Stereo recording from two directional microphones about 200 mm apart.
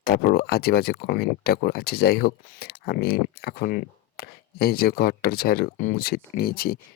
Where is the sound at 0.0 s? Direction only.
50° left (ahead or behind).